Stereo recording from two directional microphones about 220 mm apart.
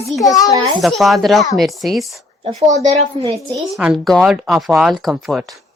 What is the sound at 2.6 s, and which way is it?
Speech, 30° right (ahead or behind).